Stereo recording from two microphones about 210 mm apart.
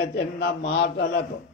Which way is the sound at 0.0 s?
55° left (ahead or behind).